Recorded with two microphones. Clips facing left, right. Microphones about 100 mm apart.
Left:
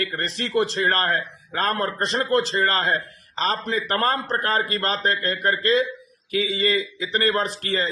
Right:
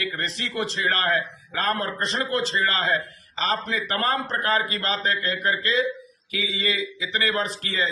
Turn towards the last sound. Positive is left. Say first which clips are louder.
# left 3 dB
turn(degrees=45)  # may be behind; listen again after turning